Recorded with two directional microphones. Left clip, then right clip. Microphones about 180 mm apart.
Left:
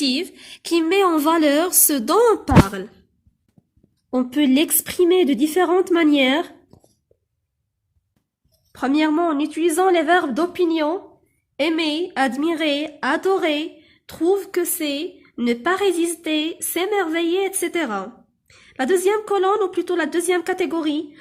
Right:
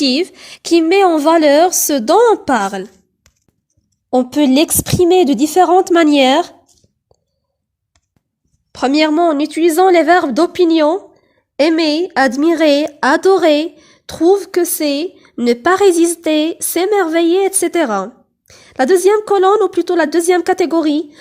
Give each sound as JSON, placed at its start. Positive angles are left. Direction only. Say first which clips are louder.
{"t": 0.0, "sound": "a woman's voice", "louder": "right 7 dB", "side_deg": -50}
{"t": 4.2, "sound": "speech", "louder": "right 6 dB", "side_deg": -40}
{"t": 8.7, "sound": "a woman's voice", "louder": "right 7 dB", "side_deg": -35}
{"t": 14.8, "sound": "a woman's voice", "louder": "right 8 dB", "side_deg": -55}